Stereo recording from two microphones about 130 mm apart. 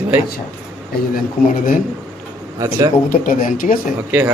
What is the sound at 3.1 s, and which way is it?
Speech, 90° left.